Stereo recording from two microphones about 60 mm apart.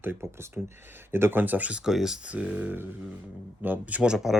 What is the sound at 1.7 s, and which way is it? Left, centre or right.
Speech, centre.